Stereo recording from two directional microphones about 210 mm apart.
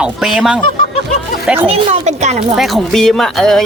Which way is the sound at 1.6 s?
30° right (ahead or behind).